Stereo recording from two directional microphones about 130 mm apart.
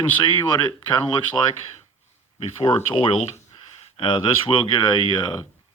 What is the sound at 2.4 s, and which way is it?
Speech, 45° left (ahead or behind).